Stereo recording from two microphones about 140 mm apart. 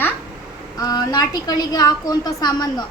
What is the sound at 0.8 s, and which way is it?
A woman's voice, 30° left (ahead or behind).